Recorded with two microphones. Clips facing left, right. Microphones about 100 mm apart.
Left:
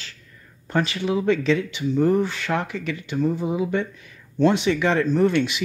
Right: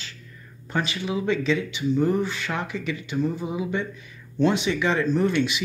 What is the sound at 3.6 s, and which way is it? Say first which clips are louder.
Speech: left 4 dB; 50° left (ahead or behind).